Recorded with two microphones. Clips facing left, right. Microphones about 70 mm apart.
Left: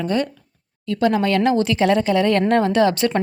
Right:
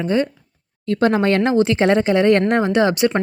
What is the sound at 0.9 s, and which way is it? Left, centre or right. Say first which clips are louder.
Speech: right 2 dB; right.